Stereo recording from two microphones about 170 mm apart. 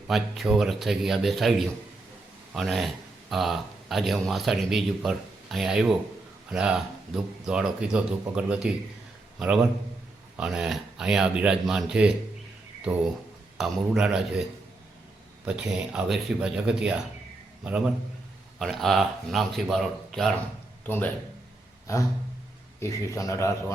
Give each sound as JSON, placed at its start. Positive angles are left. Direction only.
{"t": 0.1, "sound": "speech", "side_deg": 0}
{"t": 15.4, "sound": "a man's voice", "side_deg": -5}
{"t": 22.8, "sound": "speech", "side_deg": 20}